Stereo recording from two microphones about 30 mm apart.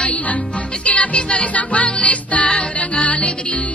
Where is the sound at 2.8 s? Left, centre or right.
Left.